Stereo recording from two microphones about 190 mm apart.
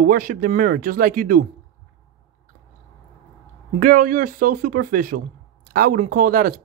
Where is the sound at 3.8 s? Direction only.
45° right (ahead or behind).